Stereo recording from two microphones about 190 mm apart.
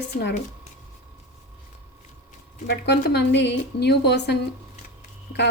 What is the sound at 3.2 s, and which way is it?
A woman's voice, 65° left (ahead or behind).